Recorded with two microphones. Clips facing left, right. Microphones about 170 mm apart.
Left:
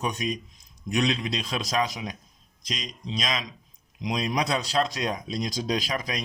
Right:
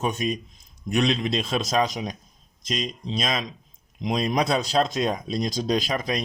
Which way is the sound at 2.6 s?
50° right (ahead or behind).